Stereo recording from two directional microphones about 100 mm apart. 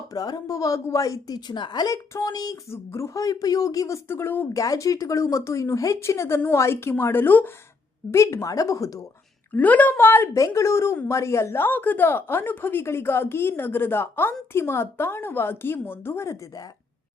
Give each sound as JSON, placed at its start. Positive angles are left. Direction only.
{"t": 0.1, "sound": "a woman's voice", "side_deg": 40}
{"t": 2.6, "sound": "a woman's voice", "side_deg": 30}
{"t": 4.5, "sound": "a woman's voice", "side_deg": 35}
{"t": 9.6, "sound": "a woman's voice", "side_deg": 15}